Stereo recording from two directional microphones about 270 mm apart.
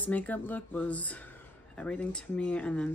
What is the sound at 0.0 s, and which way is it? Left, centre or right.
A man's voice, centre.